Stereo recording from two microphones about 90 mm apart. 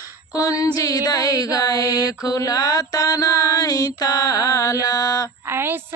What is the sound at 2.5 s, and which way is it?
Mantra, 40° left (ahead or behind).